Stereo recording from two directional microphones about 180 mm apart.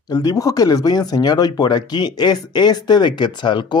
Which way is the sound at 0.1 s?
20° left (ahead or behind).